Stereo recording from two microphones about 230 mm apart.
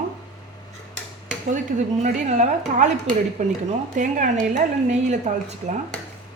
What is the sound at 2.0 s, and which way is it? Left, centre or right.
A woman's voice, right.